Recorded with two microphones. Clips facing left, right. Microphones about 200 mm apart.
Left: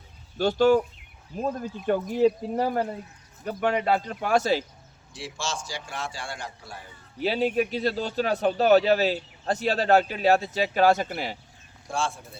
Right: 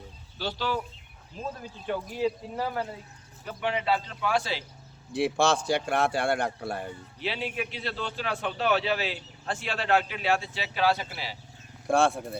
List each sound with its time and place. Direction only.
0.3 s speech: 50° left (ahead or behind)
1.9 s speech: 50° left (ahead or behind)
5.1 s speech: 60° right (ahead or behind)
7.2 s a man's voice: 40° left (ahead or behind)
11.9 s speech: 60° right (ahead or behind)